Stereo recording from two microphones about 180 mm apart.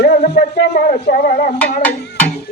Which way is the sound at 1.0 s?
55° left (ahead or behind).